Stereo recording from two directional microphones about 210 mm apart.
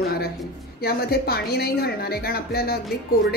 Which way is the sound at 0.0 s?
45° left (ahead or behind).